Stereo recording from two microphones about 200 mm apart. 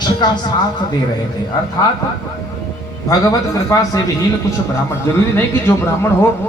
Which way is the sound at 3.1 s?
15° left (ahead or behind).